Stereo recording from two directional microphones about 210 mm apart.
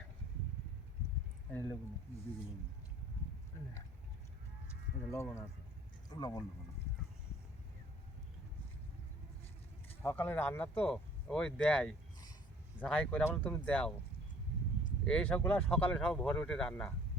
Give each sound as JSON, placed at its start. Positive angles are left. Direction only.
{"t": 1.5, "sound": "speech", "side_deg": 10}
{"t": 5.1, "sound": "speech", "side_deg": 15}
{"t": 10.0, "sound": "speech", "side_deg": 10}
{"t": 15.0, "sound": "speech", "side_deg": 5}